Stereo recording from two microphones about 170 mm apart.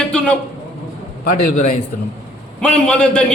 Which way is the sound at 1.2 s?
55° left (ahead or behind).